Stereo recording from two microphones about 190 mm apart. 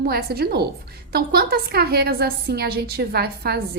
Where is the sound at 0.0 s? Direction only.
55° right (ahead or behind).